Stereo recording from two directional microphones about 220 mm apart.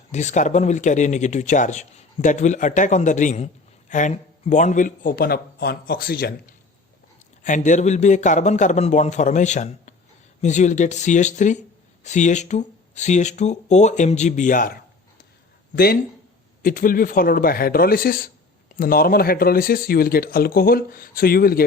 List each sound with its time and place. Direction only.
0.1 s speech: 30° left (ahead or behind)
7.4 s speech: 35° left (ahead or behind)